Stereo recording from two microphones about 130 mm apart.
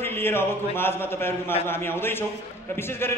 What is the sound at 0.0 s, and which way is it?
A man's voice, 15° left (ahead or behind).